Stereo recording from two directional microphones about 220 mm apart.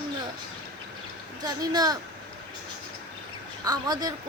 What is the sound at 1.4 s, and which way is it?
Speech, 15° right (ahead or behind).